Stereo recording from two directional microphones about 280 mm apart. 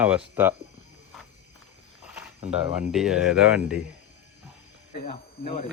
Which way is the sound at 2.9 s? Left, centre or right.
Centre.